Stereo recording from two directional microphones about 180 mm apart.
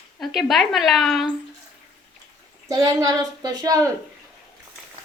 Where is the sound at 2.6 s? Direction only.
20° right (ahead or behind).